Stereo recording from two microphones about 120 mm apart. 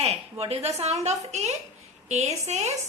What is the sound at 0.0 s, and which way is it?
A woman's voice, 60° right (ahead or behind).